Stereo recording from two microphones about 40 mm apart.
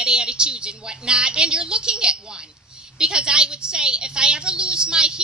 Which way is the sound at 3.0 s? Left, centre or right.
Right.